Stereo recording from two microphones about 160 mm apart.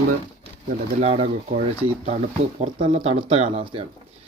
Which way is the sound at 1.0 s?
45° right (ahead or behind).